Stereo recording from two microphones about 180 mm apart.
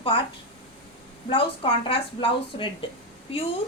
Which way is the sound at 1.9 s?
25° left (ahead or behind).